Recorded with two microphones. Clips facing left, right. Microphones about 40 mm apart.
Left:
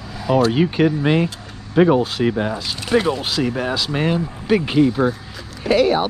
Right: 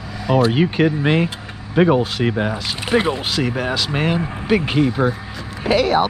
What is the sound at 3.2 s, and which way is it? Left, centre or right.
Speech, centre.